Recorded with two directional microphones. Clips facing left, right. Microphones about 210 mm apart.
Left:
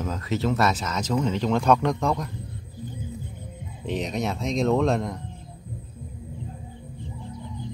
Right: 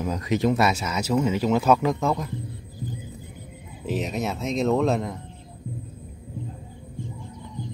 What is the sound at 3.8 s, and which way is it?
Speech, 5° right (ahead or behind).